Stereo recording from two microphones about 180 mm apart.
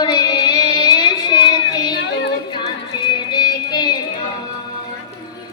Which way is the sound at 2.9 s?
25° left (ahead or behind).